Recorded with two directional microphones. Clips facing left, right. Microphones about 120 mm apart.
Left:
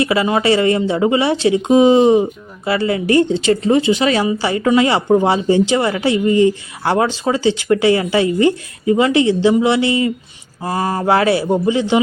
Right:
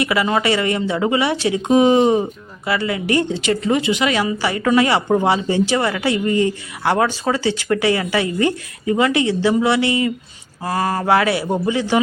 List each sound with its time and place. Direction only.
0.0 s speech: 25° left (ahead or behind)